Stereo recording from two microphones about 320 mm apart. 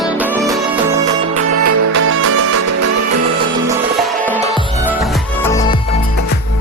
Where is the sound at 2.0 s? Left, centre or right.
Right.